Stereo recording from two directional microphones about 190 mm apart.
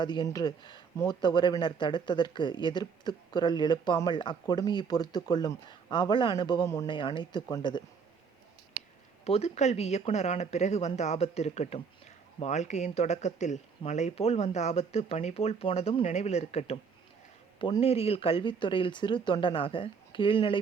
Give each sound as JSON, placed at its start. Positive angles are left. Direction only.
{"t": 0.0, "sound": "speech", "side_deg": 25}
{"t": 9.2, "sound": "speech", "side_deg": 35}